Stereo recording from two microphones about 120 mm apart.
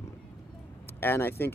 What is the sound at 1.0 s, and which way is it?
Speech, 20° left (ahead or behind).